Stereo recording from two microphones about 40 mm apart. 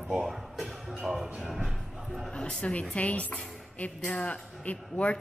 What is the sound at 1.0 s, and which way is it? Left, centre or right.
Speech, centre.